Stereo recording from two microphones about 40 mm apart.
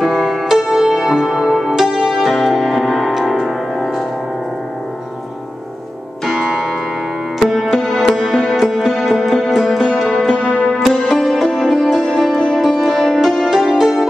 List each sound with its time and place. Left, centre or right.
0.0 s music: centre
6.2 s music: centre
10.3 s music: centre
10.6 s music: centre
13.2 s music: centre